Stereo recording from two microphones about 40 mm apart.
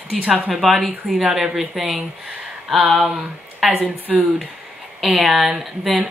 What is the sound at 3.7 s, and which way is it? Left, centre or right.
Speech, right.